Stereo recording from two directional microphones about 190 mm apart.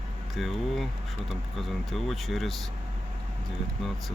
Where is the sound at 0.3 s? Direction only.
Centre (ahead or behind).